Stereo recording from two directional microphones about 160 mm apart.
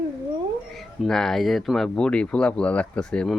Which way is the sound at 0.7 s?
Centre (ahead or behind).